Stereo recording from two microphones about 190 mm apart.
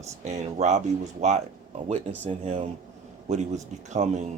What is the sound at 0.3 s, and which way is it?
Speech, 35° right (ahead or behind).